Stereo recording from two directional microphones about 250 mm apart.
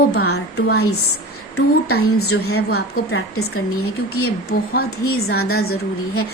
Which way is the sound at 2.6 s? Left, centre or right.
Left.